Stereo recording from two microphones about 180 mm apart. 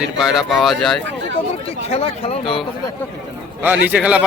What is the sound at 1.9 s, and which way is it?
Speech, 35° left (ahead or behind).